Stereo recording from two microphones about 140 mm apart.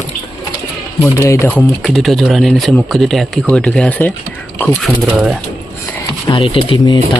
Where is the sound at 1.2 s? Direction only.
20° left (ahead or behind).